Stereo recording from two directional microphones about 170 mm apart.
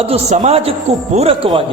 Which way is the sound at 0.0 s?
40° right (ahead or behind).